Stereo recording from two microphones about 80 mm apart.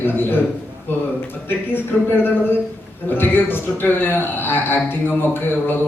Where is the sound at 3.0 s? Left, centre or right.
Left.